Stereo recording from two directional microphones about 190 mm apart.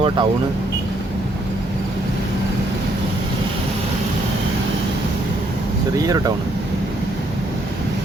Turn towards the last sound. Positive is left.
turn(degrees=-20)  # may be behind; listen again after turning